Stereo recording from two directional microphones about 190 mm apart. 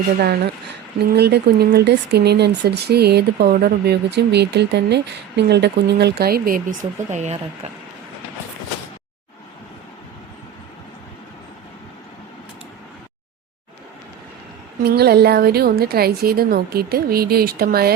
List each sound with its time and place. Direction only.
1.1 s a woman's voice: 60° right (ahead or behind); by 7.7 s 35° right (ahead or behind)
14.8 s a woman's voice: 55° right (ahead or behind)